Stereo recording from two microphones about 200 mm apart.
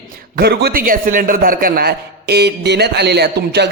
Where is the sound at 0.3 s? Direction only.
50° right (ahead or behind).